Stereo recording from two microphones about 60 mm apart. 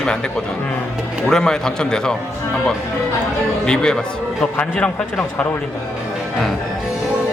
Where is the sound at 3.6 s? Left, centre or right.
Centre.